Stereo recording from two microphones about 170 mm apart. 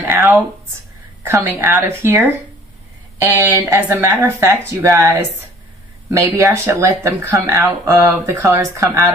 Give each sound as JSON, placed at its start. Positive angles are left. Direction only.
{"t": 0.0, "sound": "a sound", "side_deg": -10}
{"t": 1.2, "sound": "speech", "side_deg": -15}
{"t": 3.3, "sound": "speech", "side_deg": -15}